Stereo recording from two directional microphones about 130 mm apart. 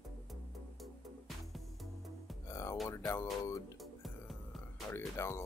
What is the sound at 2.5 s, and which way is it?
Music, 20° left (ahead or behind).